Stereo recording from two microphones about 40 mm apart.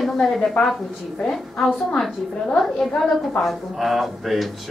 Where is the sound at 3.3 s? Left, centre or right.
Centre.